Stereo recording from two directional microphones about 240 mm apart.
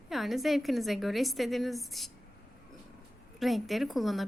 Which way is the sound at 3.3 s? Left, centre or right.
Centre.